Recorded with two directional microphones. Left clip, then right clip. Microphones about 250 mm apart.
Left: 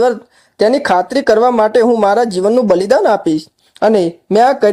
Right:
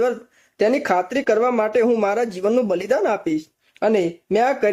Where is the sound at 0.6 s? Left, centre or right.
Centre.